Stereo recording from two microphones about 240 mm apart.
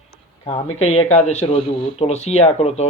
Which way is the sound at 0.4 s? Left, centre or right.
Left.